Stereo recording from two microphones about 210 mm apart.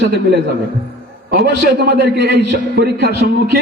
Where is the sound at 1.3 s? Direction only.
50° right (ahead or behind).